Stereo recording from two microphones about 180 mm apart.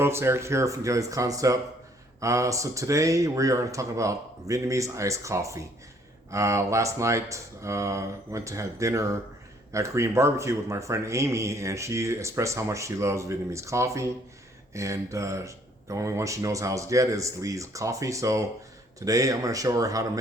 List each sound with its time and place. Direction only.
0.0 s speech: 15° right (ahead or behind)